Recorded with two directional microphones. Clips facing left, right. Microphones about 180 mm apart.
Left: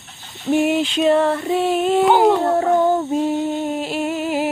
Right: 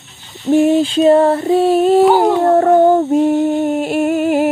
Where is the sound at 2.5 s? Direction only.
55° right (ahead or behind).